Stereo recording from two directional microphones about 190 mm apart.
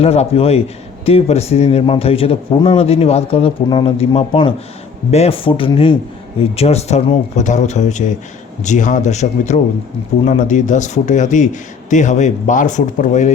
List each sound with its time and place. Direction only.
0.0 s a man's voice: 30° left (ahead or behind)